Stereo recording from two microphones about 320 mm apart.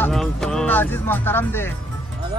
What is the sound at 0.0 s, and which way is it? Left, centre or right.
Speech, centre.